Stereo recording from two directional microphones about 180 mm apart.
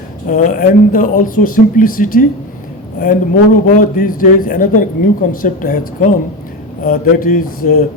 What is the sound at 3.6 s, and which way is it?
Speech, 45° left (ahead or behind).